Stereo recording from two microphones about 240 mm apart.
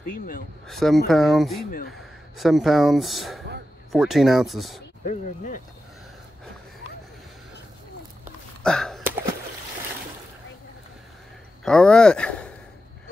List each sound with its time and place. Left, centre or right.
0.0 s speech: left
0.7 s speech: centre
5.0 s speech: left
8.6 s a sound: centre
11.6 s speech: centre